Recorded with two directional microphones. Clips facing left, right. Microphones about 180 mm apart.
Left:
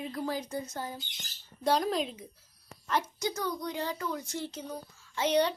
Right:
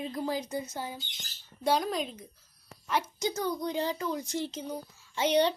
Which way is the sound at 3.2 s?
25° right (ahead or behind).